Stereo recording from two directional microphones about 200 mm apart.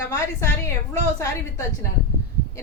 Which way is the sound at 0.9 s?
15° left (ahead or behind).